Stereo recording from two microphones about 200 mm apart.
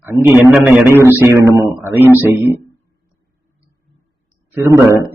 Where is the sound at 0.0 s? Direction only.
10° right (ahead or behind).